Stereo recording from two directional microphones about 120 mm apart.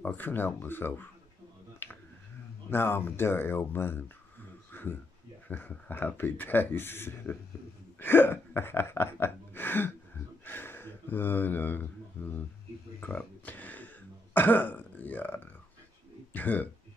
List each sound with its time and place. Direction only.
0.0 s speech: 15° left (ahead or behind)
1.8 s finger snapping: 15° left (ahead or behind)
2.7 s speech: 20° left (ahead or behind)
4.7 s a sound: 15° left (ahead or behind)
5.5 s speech: 15° left (ahead or behind)
8.0 s a sound: 20° left (ahead or behind)
13.0 s throat clearing: 15° left (ahead or behind)
16.3 s speech: 15° left (ahead or behind)